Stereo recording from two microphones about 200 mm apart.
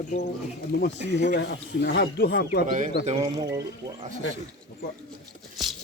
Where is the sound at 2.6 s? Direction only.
40° right (ahead or behind).